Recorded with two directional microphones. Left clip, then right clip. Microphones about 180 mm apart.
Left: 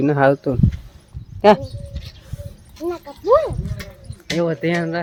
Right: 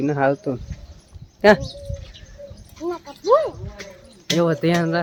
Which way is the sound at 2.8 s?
35° left (ahead or behind).